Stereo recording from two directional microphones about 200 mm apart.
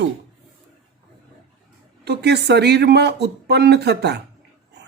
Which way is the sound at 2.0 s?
55° right (ahead or behind).